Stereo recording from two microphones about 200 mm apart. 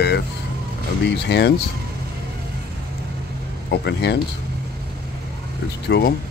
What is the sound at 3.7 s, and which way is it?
Speech, 55° left (ahead or behind).